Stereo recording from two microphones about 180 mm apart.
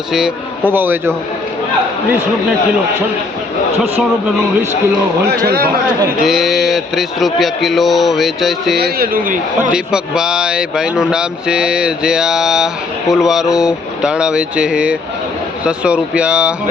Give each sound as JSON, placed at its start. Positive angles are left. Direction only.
{"t": 0.1, "sound": "a man's voice", "side_deg": -5}
{"t": 5.3, "sound": "a man's voice", "side_deg": -60}
{"t": 6.2, "sound": "speech", "side_deg": 0}
{"t": 8.8, "sound": "speech", "side_deg": -55}
{"t": 9.7, "sound": "speech", "side_deg": -5}